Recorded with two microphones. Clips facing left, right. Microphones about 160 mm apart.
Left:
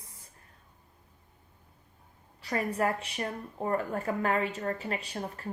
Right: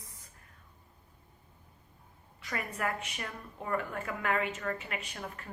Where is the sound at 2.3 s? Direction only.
35° left (ahead or behind).